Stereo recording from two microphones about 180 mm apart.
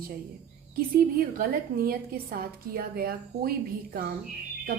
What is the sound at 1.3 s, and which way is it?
A woman's voice, 55° right (ahead or behind).